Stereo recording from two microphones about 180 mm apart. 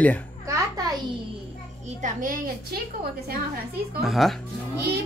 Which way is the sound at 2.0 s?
45° right (ahead or behind).